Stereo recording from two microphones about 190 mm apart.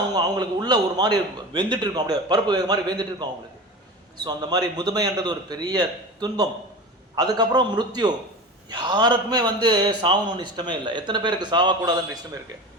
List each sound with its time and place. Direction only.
0.1 s a man's voice: 20° right (ahead or behind)